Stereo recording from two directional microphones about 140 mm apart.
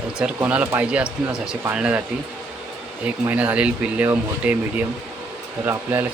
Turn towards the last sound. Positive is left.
turn(degrees=-15)  # may be behind; listen again after turning